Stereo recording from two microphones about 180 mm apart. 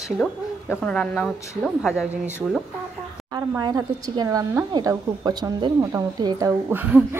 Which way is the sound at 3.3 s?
20° right (ahead or behind).